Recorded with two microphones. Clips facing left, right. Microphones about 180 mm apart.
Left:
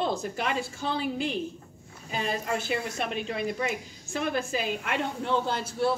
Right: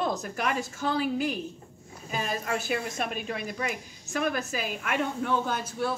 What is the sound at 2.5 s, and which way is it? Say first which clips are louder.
A woman's voice: even; 25° left (ahead or behind).